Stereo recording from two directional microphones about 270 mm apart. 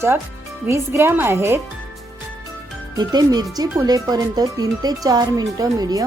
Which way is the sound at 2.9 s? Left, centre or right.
Centre.